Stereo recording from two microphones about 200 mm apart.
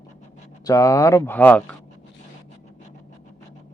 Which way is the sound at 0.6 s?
15° left (ahead or behind).